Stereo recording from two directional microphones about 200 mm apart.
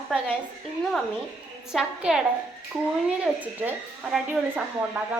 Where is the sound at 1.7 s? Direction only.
5° right (ahead or behind).